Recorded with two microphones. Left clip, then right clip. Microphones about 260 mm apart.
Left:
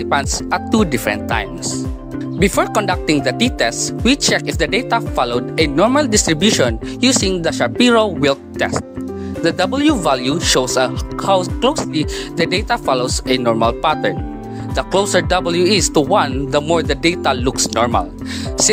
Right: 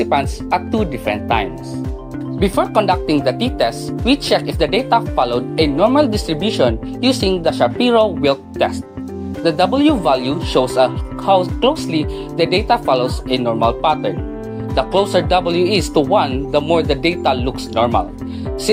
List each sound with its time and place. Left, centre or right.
0.0 s speech: left